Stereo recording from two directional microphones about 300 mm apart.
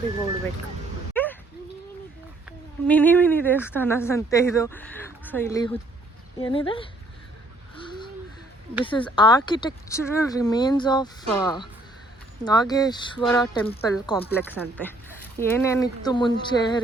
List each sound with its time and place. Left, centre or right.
1.1 s a sound: centre
2.8 s a woman's voice: centre
8.8 s a woman's voice: centre